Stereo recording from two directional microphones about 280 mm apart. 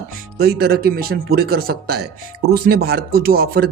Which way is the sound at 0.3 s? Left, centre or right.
Right.